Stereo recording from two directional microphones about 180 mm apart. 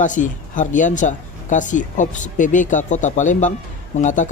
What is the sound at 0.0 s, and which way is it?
Speech, 45° left (ahead or behind).